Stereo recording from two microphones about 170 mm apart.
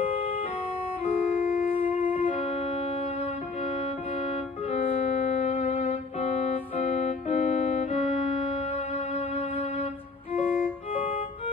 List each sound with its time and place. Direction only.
1.7 s wind instrument: 30° left (ahead or behind)
2.0 s music: 35° left (ahead or behind)
5.1 s music: 50° left (ahead or behind)
5.9 s organ: 40° left (ahead or behind)
8.7 s music: 35° left (ahead or behind)
10.4 s music: 5° right (ahead or behind)
10.9 s organ: 35° left (ahead or behind)